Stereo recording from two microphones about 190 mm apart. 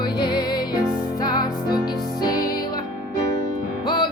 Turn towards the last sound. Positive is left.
turn(degrees=20)  # may be behind; listen again after turning